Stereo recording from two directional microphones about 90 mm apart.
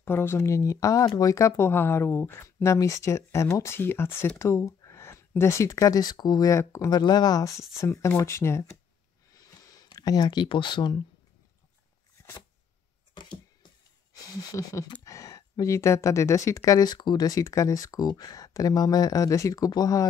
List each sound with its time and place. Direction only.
0.0 s speech: 25° left (ahead or behind); by 6.5 s 45° left (ahead or behind)
6.5 s speech: 30° left (ahead or behind)
6.9 s speech: 50° left (ahead or behind); by 8.6 s 30° left (ahead or behind)
9.3 s sniff: 40° left (ahead or behind)
9.9 s speech: 45° left (ahead or behind)
10.5 s speech: 65° left (ahead or behind)
14.5 s speech: 40° left (ahead or behind)
15.0 s a sound: 35° left (ahead or behind)
15.6 s speech: 30° left (ahead or behind)